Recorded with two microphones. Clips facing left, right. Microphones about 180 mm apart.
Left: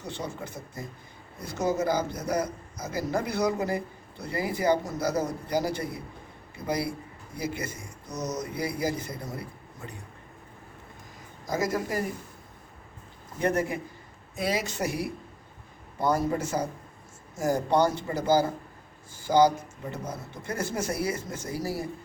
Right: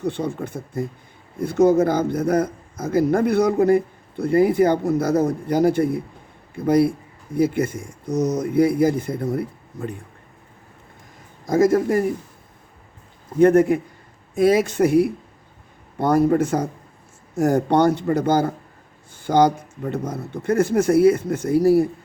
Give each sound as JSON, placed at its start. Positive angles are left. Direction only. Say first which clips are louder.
{"t": 0.0, "sound": "a man's voice", "louder": "right 11 dB", "side_deg": -55}
{"t": 11.4, "sound": "a man's voice", "louder": "right 12 dB", "side_deg": -50}
{"t": 13.4, "sound": "speech", "louder": "right 13 dB", "side_deg": -55}